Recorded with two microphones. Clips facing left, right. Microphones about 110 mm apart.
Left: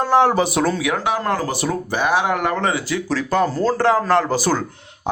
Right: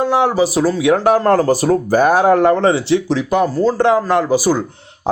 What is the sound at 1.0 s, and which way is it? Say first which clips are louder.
Speech: right 9 dB; 45° right (ahead or behind).